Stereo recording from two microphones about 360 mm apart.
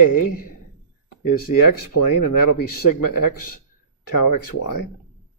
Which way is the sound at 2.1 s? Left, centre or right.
Left.